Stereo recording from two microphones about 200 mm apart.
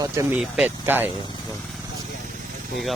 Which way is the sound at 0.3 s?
5° right (ahead or behind).